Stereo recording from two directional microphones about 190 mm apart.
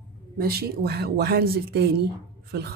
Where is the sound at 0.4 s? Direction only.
55° right (ahead or behind).